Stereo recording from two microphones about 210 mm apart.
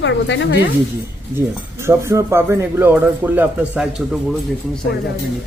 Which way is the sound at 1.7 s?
15° right (ahead or behind).